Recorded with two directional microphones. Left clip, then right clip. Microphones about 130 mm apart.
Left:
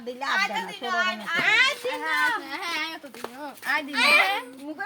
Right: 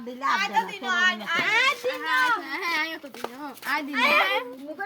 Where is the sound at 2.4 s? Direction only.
20° left (ahead or behind).